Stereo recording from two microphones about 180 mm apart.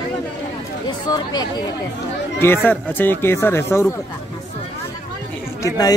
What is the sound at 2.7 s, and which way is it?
A man's voice, 10° left (ahead or behind).